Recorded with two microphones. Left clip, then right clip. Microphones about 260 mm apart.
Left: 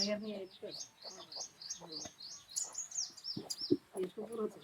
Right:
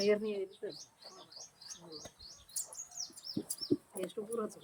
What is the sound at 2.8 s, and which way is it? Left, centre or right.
Bird, right.